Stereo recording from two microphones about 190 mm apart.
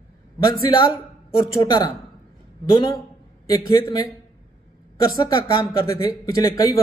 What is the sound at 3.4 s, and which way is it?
Speech, 20° left (ahead or behind).